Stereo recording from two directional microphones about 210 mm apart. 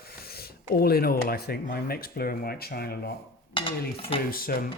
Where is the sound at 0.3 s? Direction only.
45° left (ahead or behind).